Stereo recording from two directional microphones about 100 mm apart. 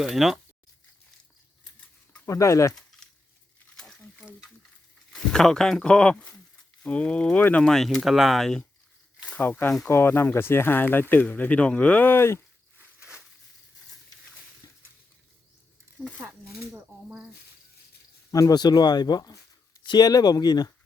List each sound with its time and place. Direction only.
0.0 s speech: centre (ahead or behind)
2.2 s speech: 30° left (ahead or behind)
2.7 s a sound: centre (ahead or behind)
5.1 s speech: 5° left (ahead or behind)
7.6 s speech: 5° left (ahead or behind)
9.3 s speech: 20° left (ahead or behind)
13.0 s a sound: 10° right (ahead or behind)
16.7 s a sound: 15° right (ahead or behind)
18.3 s speech: 40° left (ahead or behind)